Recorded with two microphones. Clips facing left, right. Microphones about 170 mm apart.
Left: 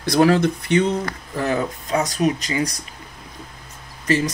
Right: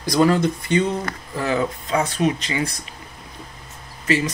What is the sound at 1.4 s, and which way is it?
Speech, 45° left (ahead or behind).